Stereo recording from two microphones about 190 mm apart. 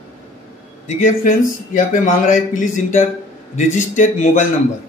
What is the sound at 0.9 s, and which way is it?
A man's voice, 45° left (ahead or behind).